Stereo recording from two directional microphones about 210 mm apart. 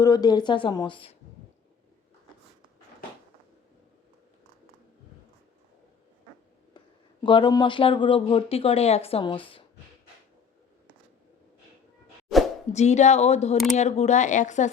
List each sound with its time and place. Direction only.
0.0 s speech: 20° left (ahead or behind)
7.3 s speech: 20° left (ahead or behind)
12.7 s speech: 35° left (ahead or behind)